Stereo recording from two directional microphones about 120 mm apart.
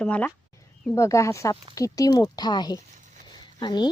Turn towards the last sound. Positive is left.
turn(degrees=35)  # may be behind; listen again after turning